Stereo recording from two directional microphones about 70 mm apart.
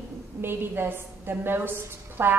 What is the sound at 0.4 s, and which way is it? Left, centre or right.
A woman's voice, right.